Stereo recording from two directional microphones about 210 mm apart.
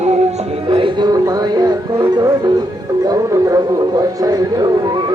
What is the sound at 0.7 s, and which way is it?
Music, 25° right (ahead or behind).